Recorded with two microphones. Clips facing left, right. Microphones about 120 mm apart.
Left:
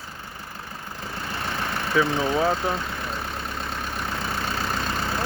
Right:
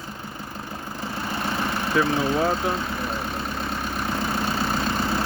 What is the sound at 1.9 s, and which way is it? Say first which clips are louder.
Speech: even; 5° right (ahead or behind).